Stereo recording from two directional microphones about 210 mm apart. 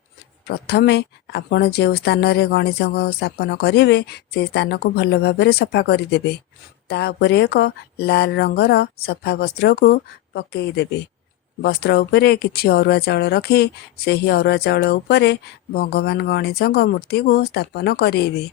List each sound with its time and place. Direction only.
0.4 s speech: 50° left (ahead or behind)